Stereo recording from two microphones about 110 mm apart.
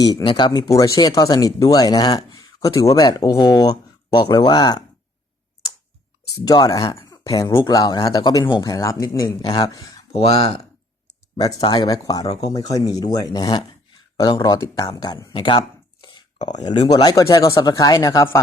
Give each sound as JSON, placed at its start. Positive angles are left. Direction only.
{"t": 0.0, "sound": "speech", "side_deg": 40}
{"t": 0.7, "sound": "speech", "side_deg": 30}
{"t": 6.2, "sound": "speech", "side_deg": 30}
{"t": 10.1, "sound": "speech", "side_deg": 70}
{"t": 11.3, "sound": "speech", "side_deg": 35}